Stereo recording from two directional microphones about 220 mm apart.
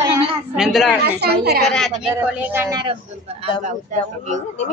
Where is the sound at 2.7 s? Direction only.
25° right (ahead or behind).